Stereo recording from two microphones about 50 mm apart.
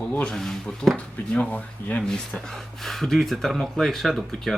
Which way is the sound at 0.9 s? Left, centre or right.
Left.